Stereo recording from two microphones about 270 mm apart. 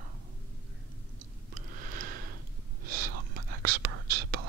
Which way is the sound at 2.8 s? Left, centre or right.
Right.